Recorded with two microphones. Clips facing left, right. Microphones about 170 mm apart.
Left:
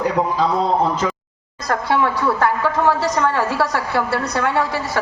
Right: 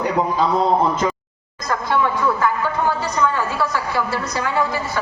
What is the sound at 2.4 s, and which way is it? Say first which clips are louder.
A woman's voice: left 2 dB; 80° left.